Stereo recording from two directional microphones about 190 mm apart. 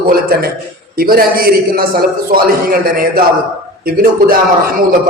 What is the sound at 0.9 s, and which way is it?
A man's voice, 50° right (ahead or behind).